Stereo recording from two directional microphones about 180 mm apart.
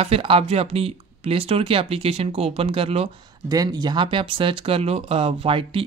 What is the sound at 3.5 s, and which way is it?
Speech, 20° right (ahead or behind).